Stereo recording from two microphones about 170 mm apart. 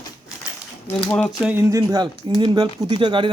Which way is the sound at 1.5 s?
15° right (ahead or behind).